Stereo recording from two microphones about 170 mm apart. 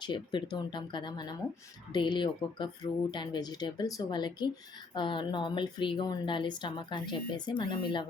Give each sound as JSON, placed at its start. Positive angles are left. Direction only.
{"t": 0.0, "sound": "a woman's voice", "side_deg": 25}